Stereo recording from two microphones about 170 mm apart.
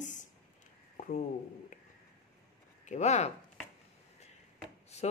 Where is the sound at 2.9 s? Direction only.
40° left (ahead or behind).